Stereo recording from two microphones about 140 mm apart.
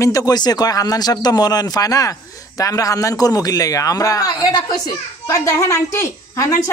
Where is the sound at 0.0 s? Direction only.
25° left (ahead or behind).